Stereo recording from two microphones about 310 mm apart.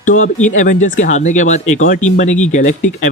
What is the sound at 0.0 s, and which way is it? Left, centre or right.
Speech, left.